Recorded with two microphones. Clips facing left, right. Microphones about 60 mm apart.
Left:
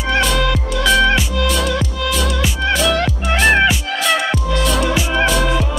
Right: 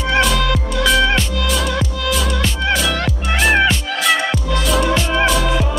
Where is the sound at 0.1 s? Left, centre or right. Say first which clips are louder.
Even; centre.